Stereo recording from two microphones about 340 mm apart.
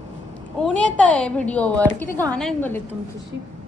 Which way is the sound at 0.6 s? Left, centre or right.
Centre.